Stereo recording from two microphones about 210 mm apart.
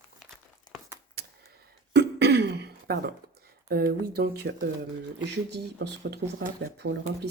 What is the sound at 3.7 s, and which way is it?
Speech, 45° right (ahead or behind).